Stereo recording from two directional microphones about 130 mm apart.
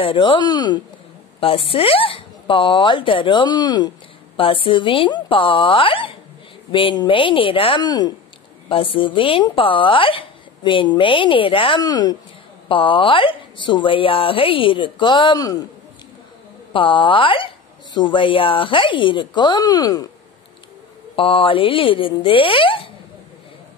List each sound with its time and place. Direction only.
0.0 s speech: 40° left (ahead or behind)
1.4 s speech: 45° left (ahead or behind)
4.4 s speech: 45° left (ahead or behind)
7.8 s speech: 30° left (ahead or behind)
8.6 s speech: 45° left (ahead or behind)
12.6 s speech: 40° left (ahead or behind)
16.7 s speech: 40° left (ahead or behind)
21.2 s speech: 40° left (ahead or behind)